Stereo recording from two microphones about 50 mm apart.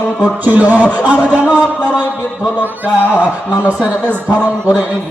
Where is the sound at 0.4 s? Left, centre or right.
Right.